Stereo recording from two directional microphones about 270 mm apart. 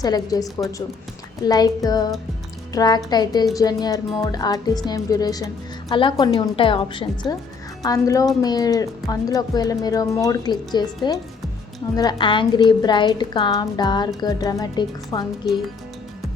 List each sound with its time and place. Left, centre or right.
0.0 s speech: centre